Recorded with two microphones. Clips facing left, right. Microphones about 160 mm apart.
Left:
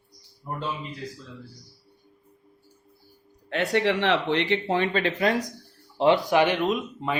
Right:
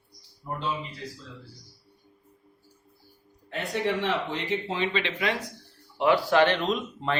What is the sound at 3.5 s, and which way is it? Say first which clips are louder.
Speech: left 5 dB; 80° left.